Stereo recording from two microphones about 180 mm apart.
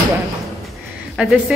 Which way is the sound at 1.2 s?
5° right (ahead or behind).